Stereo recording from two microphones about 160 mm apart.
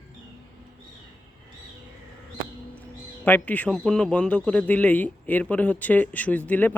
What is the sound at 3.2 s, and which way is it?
A man's voice, 10° left (ahead or behind).